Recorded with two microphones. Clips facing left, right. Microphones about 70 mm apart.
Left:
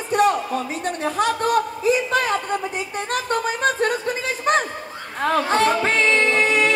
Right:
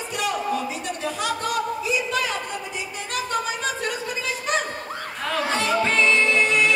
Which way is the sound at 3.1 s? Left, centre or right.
Left.